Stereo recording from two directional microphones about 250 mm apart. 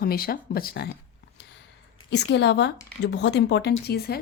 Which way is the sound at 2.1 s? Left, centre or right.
Left.